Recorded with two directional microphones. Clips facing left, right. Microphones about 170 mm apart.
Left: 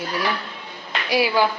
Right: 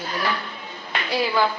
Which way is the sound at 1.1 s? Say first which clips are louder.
Left 3 dB; 10° left (ahead or behind).